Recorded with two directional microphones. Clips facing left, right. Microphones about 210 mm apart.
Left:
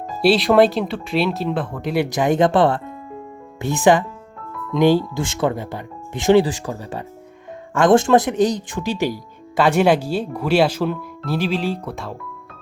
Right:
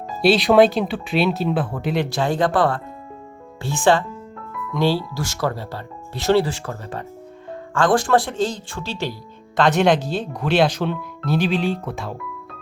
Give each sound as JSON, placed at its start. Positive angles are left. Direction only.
{"t": 0.2, "sound": "speech", "side_deg": 0}
{"t": 2.0, "sound": "speech", "side_deg": 15}